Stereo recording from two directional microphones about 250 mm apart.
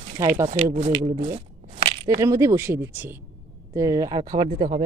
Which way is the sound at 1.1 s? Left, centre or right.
Right.